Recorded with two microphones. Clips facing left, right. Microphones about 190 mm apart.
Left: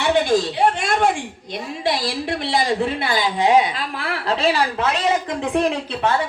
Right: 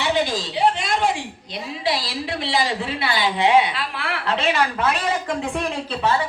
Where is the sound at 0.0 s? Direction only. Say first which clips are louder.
Left 5 dB; 55° left (ahead or behind).